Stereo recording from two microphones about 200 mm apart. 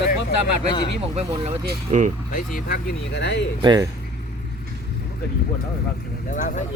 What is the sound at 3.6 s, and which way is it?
Speech, 20° right (ahead or behind).